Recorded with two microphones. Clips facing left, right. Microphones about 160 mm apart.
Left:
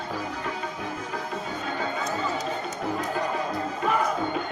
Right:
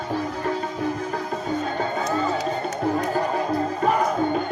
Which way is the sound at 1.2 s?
45° right (ahead or behind).